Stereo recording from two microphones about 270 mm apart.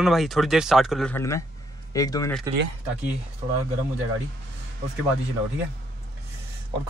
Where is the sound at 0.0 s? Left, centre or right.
Centre.